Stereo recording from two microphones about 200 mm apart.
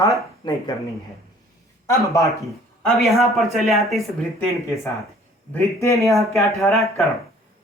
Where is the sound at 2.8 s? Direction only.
Centre (ahead or behind).